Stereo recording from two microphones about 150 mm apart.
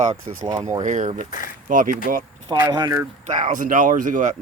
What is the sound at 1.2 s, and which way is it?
Speech, 55° left (ahead or behind).